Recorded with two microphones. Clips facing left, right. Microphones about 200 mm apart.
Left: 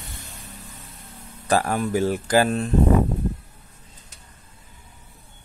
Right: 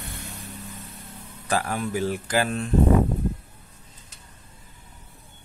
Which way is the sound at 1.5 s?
40° left (ahead or behind).